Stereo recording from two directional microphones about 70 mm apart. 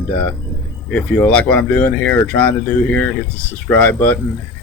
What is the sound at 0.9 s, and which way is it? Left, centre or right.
Speech, centre.